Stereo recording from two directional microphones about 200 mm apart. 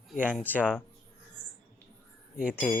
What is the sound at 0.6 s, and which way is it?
Speech, 5° right (ahead or behind).